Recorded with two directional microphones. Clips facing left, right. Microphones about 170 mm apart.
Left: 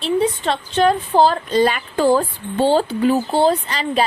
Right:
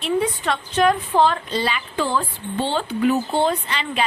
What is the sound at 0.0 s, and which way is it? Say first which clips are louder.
A woman's voice: left 3 dB; 30° left (ahead or behind).